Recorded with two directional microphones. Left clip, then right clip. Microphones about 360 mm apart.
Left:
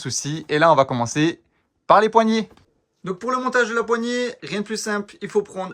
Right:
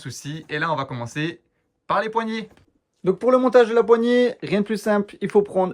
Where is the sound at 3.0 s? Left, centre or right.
Centre.